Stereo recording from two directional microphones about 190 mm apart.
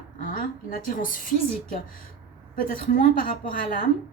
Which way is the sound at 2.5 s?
45° left (ahead or behind).